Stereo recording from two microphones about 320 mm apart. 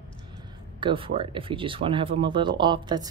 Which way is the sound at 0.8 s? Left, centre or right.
Centre.